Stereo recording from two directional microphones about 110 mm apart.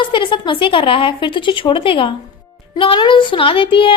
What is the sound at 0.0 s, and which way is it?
A woman's voice, 45° left (ahead or behind).